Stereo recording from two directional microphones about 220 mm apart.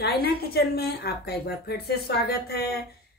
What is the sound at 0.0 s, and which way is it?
A woman's voice, 45° left (ahead or behind).